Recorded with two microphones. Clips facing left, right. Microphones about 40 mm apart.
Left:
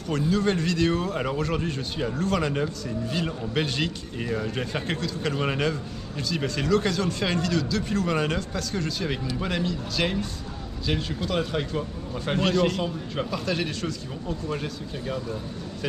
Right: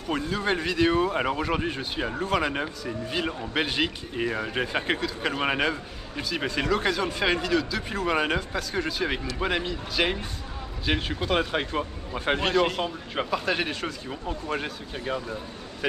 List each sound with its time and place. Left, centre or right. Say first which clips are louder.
0.1 s speech: left 2 dB; centre